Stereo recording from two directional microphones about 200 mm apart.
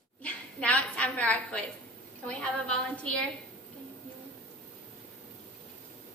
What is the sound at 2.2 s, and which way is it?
A woman's voice, 5° left (ahead or behind).